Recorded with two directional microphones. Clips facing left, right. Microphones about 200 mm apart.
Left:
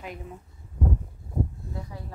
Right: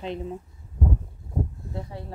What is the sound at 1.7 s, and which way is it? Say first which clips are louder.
Speech: right 3 dB; 30° right (ahead or behind).